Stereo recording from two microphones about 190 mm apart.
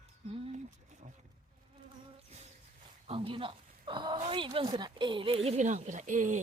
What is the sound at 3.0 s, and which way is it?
A woman's voice, 30° right (ahead or behind).